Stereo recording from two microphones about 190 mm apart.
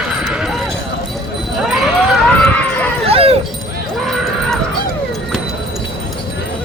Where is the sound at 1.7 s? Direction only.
5° right (ahead or behind).